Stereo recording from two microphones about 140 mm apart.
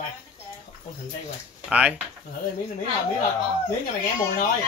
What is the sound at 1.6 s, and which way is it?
Speech, 10° right (ahead or behind).